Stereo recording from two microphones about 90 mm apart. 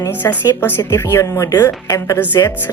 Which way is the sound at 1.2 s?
40° left (ahead or behind).